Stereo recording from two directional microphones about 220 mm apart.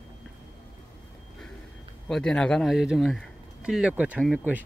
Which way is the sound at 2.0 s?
5° left (ahead or behind).